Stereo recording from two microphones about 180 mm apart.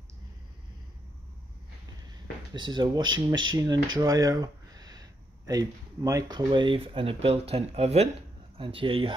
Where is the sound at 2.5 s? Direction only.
25° right (ahead or behind).